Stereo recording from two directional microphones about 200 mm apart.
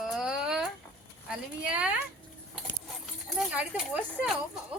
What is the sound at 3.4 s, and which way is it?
Speech, 5° right (ahead or behind).